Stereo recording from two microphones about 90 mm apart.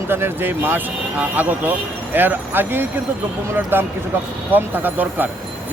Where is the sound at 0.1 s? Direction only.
25° right (ahead or behind).